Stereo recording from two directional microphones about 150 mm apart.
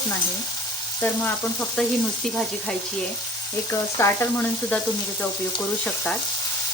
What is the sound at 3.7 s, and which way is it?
Frying, 15° left (ahead or behind).